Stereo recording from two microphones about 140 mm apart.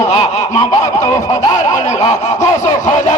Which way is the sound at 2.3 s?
60° left (ahead or behind).